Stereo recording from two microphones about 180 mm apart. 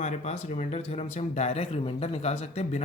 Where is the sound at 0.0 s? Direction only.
40° left (ahead or behind).